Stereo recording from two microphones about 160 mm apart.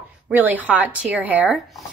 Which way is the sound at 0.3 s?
10° right (ahead or behind).